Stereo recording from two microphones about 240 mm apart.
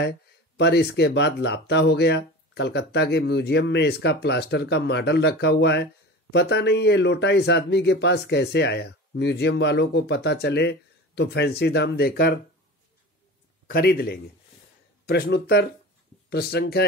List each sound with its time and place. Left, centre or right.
0.6 s speech: left
13.7 s speech: left